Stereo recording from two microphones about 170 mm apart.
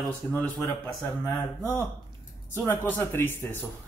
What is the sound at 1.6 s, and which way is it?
Speech, 15° left (ahead or behind).